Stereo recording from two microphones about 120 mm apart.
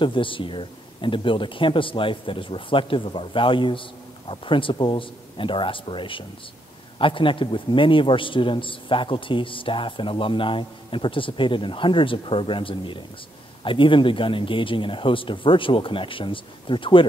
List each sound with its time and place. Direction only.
0.0 s a man's voice: 45° left (ahead or behind)